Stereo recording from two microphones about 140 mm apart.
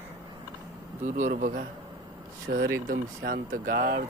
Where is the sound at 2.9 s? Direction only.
75° right (ahead or behind); by 4.0 s 90° right.